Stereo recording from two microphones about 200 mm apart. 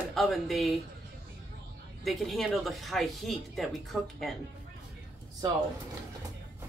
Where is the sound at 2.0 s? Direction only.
Centre (ahead or behind).